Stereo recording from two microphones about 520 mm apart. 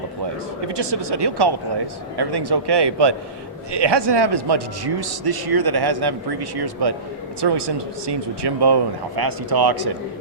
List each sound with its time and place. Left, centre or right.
0.7 s speech: right